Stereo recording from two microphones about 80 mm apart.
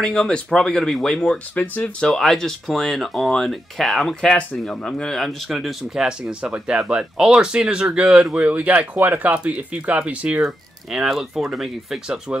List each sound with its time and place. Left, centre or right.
0.0 s speech: centre
8.4 s speech: centre